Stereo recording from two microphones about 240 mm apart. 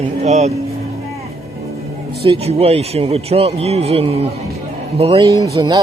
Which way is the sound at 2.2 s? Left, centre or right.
Right.